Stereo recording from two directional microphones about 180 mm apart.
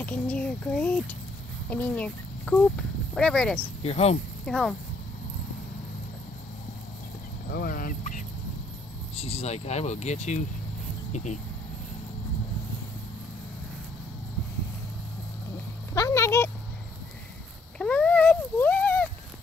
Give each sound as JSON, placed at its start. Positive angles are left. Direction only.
{"t": 0.0, "sound": "speech", "side_deg": 10}
{"t": 3.8, "sound": "speech", "side_deg": 35}
{"t": 4.5, "sound": "speech", "side_deg": 0}
{"t": 7.5, "sound": "speech", "side_deg": 50}
{"t": 9.1, "sound": "speech", "side_deg": 35}
{"t": 15.9, "sound": "a sound", "side_deg": 15}
{"t": 17.7, "sound": "a sound", "side_deg": 5}